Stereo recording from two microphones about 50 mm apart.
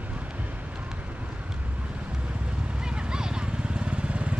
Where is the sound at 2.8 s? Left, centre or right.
Centre.